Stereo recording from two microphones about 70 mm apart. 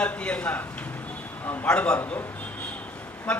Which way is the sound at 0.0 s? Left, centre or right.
Centre.